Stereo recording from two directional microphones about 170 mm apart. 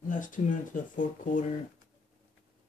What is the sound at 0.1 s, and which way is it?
Speech, 50° left (ahead or behind).